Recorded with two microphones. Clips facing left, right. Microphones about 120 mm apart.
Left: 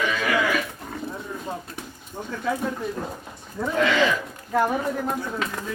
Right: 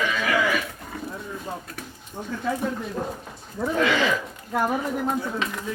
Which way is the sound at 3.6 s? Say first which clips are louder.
Right 1 dB; 20° right (ahead or behind).